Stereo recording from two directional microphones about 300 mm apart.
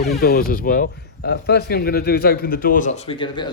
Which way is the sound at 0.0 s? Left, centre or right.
Left.